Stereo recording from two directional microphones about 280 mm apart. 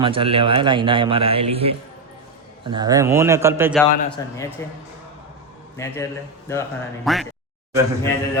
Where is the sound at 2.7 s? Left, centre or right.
Centre.